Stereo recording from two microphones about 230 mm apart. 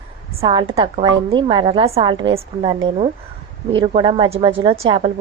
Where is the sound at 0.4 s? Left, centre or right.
Right.